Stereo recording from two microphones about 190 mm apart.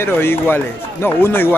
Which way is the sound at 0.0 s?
10° left (ahead or behind).